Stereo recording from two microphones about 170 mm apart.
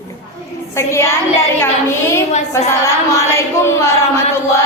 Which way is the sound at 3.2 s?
15° left (ahead or behind).